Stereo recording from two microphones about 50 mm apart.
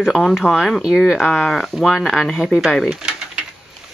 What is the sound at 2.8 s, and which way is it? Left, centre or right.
Speech, centre.